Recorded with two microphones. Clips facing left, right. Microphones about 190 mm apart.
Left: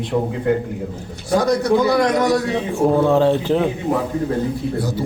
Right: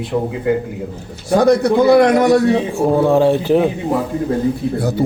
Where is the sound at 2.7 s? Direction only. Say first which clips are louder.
Left 2 dB; 10° right (ahead or behind).